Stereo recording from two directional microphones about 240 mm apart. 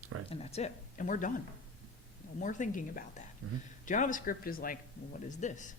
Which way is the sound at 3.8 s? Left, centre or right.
Left.